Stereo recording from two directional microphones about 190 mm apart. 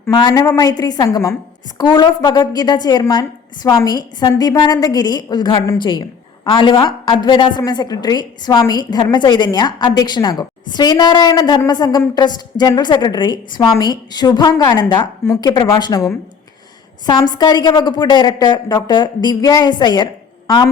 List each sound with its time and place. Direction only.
0.1 s a woman's voice: 20° left (ahead or behind)
14.9 s a woman's voice: 15° left (ahead or behind)